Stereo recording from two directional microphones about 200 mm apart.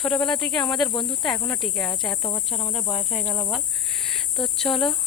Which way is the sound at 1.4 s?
5° left (ahead or behind).